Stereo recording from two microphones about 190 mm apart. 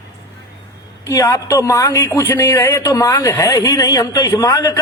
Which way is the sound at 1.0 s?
15° left (ahead or behind).